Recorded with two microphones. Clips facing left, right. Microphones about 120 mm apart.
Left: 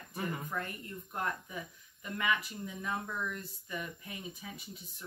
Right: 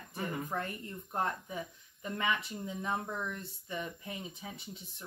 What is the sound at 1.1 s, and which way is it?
Speech, 30° right (ahead or behind).